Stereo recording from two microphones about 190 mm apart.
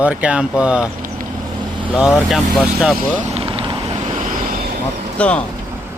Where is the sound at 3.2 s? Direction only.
30° right (ahead or behind).